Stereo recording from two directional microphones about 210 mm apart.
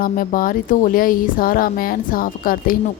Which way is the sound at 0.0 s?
40° left (ahead or behind).